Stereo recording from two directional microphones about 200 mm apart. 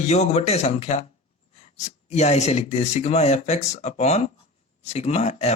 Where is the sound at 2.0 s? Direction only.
35° left (ahead or behind).